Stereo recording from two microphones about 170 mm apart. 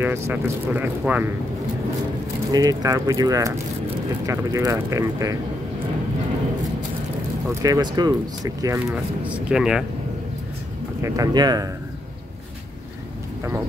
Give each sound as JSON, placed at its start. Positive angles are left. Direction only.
{"t": 0.0, "sound": "speech", "side_deg": -15}
{"t": 2.5, "sound": "speech", "side_deg": -20}
{"t": 7.6, "sound": "speech", "side_deg": -20}
{"t": 11.0, "sound": "speech", "side_deg": -20}